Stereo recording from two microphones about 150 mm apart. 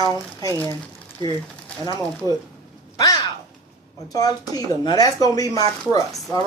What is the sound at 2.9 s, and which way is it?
Speech, 25° left (ahead or behind).